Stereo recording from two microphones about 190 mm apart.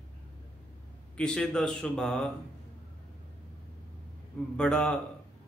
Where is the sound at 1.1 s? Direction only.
5° left (ahead or behind).